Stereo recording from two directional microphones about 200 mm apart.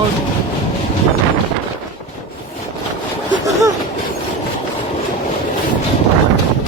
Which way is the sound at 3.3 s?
15° right (ahead or behind).